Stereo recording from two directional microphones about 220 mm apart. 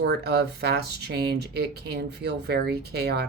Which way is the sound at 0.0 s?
50° right (ahead or behind).